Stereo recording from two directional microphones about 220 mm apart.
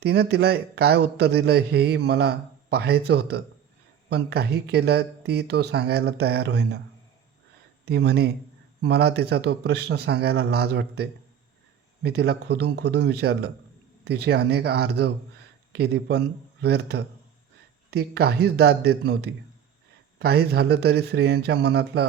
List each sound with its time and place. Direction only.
0.0 s a man's voice: 50° right (ahead or behind)
7.9 s a man's voice: 50° right (ahead or behind)